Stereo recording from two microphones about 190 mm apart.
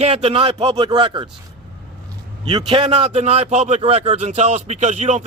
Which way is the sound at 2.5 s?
30° right (ahead or behind).